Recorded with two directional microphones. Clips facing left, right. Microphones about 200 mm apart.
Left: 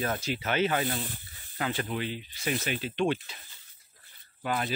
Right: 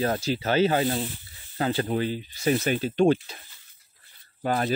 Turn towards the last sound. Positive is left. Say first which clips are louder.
# right 5 dB
turn(degrees=-40)  # may be behind; listen again after turning